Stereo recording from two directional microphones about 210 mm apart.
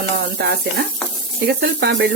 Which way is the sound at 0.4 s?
50° right (ahead or behind).